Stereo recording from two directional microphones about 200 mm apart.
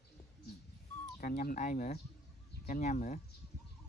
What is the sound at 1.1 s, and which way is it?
Speech, 45° left (ahead or behind).